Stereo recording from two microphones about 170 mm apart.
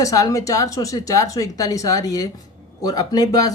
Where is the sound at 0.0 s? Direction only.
20° left (ahead or behind).